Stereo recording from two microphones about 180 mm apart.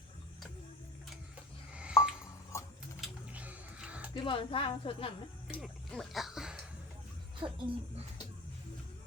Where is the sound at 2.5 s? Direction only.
15° left (ahead or behind).